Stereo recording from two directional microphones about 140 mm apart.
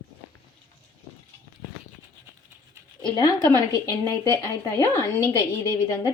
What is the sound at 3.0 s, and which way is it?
Speech, 30° left (ahead or behind).